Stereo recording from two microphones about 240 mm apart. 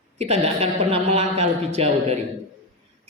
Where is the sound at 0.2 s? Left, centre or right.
Right.